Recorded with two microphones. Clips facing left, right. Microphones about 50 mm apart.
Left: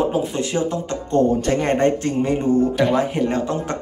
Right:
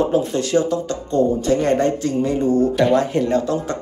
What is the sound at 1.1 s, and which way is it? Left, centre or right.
Speech, left.